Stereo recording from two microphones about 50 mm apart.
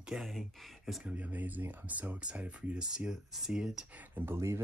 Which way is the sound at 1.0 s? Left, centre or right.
Right.